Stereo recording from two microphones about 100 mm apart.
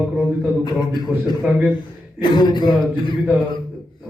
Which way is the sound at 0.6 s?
45° left (ahead or behind).